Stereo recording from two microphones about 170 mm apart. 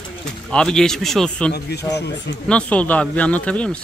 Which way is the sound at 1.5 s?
70° left (ahead or behind).